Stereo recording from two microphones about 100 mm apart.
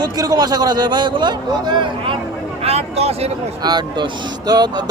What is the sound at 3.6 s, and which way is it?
A man's voice, 45° right (ahead or behind).